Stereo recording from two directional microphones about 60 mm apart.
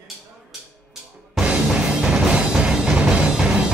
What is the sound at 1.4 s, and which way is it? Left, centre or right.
Music, right.